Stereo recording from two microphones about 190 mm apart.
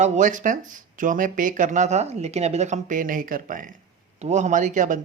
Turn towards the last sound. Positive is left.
turn(degrees=-40)  # may be behind; listen again after turning